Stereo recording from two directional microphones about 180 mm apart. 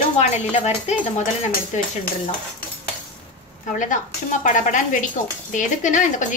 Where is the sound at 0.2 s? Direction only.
35° left (ahead or behind).